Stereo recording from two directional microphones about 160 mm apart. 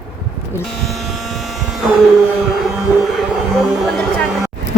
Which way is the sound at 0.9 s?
Centre (ahead or behind).